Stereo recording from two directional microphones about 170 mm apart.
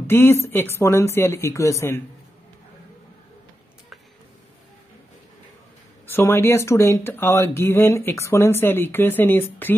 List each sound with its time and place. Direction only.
0.0 s speech: 15° left (ahead or behind)
6.0 s speech: 15° left (ahead or behind)